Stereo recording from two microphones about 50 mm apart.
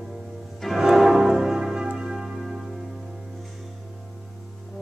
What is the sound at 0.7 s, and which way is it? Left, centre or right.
Music, centre.